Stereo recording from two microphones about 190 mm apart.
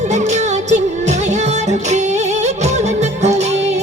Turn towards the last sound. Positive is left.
turn(degrees=-35)  # may be behind; listen again after turning